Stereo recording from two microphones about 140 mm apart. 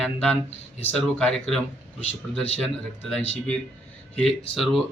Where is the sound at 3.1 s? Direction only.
10° left (ahead or behind).